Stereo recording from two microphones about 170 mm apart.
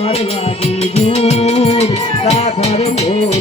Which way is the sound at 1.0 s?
40° left (ahead or behind).